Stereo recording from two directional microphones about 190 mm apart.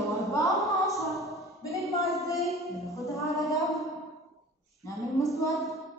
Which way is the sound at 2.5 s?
Centre (ahead or behind).